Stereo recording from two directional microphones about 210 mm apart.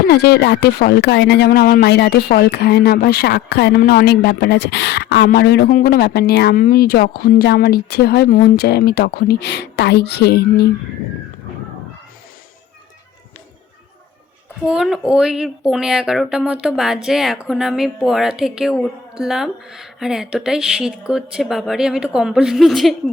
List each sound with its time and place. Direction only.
0.1 s speech: 50° left (ahead or behind)
14.7 s speech: 5° right (ahead or behind)